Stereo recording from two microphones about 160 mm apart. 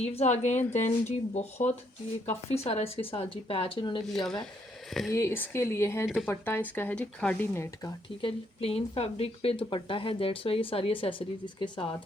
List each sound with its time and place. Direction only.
0.0 s speech: 40° left (ahead or behind)
4.0 s speech: centre (ahead or behind)
5.1 s speech: 15° left (ahead or behind)
8.2 s speech: 40° left (ahead or behind)